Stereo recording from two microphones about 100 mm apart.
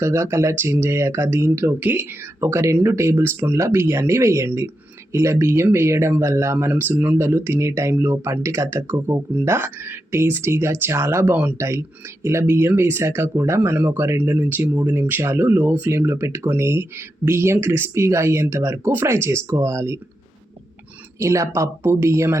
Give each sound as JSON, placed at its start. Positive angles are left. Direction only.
{"t": 0.0, "sound": "speech", "side_deg": -25}
{"t": 11.5, "sound": "speech", "side_deg": -30}
{"t": 21.2, "sound": "speech", "side_deg": -30}